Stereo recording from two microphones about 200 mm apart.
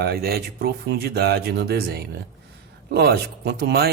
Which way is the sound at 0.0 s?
50° right (ahead or behind).